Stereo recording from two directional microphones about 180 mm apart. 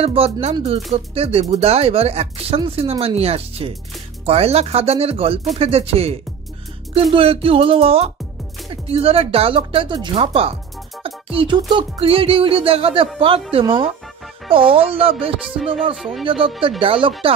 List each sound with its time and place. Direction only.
0.0 s speech: 35° right (ahead or behind)
11.0 s music: 30° right (ahead or behind)
11.7 s speech: 30° right (ahead or behind)
15.4 s music: centre (ahead or behind)
16.8 s speech: 30° right (ahead or behind)